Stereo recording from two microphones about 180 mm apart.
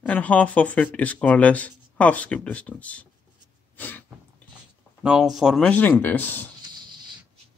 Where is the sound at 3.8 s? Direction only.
10° left (ahead or behind).